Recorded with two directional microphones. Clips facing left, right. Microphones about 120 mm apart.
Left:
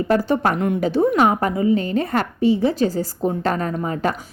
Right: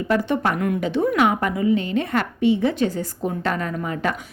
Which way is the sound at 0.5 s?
25° left (ahead or behind).